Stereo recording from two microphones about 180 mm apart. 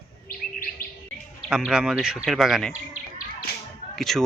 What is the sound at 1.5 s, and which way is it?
Speech, 5° right (ahead or behind).